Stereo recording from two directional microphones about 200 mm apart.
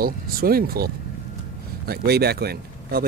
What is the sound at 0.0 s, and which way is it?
Speech, 50° right (ahead or behind).